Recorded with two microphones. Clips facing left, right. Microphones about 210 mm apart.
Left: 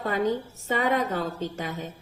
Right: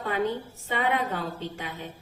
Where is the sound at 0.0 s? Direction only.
40° left (ahead or behind).